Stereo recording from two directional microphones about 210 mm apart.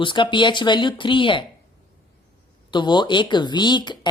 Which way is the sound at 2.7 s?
20° left (ahead or behind).